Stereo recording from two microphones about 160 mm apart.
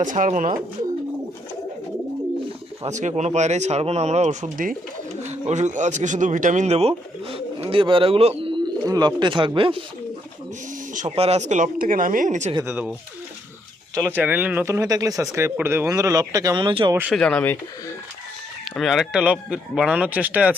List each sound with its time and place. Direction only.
0.0 s speech: 55° right (ahead or behind)
2.8 s speech: 50° right (ahead or behind)
5.2 s speech: 45° right (ahead or behind)
8.8 s speech: 25° right (ahead or behind)
11.1 s speech: 40° right (ahead or behind)
14.1 s speech: 10° right (ahead or behind); by 16.9 s 30° right (ahead or behind)
16.9 s speech: 10° right (ahead or behind)
17.2 s speech: 10° left (ahead or behind)
18.8 s speech: centre (ahead or behind)